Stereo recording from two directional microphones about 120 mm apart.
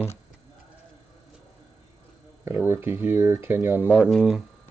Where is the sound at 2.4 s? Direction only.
20° right (ahead or behind).